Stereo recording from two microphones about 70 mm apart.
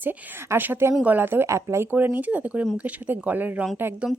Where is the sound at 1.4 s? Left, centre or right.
Right.